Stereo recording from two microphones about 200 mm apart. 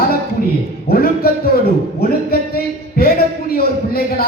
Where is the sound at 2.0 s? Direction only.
50° left (ahead or behind).